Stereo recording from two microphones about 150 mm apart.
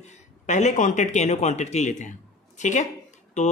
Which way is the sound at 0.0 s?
50° left (ahead or behind).